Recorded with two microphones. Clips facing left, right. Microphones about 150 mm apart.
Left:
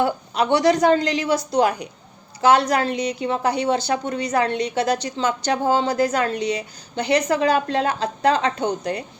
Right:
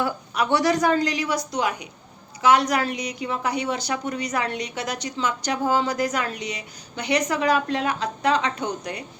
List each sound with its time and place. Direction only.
0.0 s a woman's voice: 25° left (ahead or behind)